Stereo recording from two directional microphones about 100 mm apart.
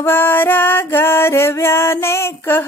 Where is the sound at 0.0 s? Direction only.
20° left (ahead or behind).